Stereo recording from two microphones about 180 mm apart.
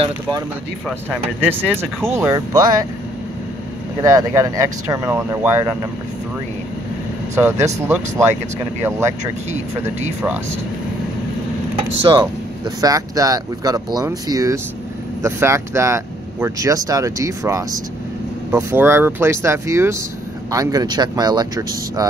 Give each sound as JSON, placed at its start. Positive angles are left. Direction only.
{"t": 0.8, "sound": "speech", "side_deg": -5}
{"t": 4.0, "sound": "speech", "side_deg": -20}
{"t": 7.3, "sound": "speech", "side_deg": -15}
{"t": 9.5, "sound": "speech", "side_deg": -40}
{"t": 10.2, "sound": "speech", "side_deg": -10}
{"t": 11.7, "sound": "speech", "side_deg": -30}